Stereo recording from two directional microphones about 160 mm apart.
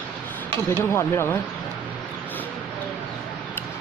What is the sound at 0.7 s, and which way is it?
Speech, 15° left (ahead or behind).